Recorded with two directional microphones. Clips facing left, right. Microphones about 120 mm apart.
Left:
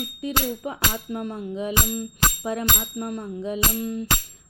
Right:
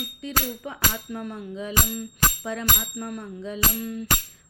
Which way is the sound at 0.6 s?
30° left (ahead or behind).